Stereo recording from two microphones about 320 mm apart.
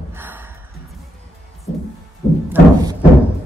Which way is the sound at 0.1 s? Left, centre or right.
Centre.